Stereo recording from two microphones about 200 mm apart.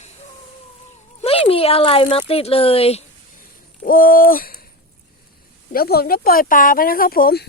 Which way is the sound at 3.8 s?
45° left (ahead or behind).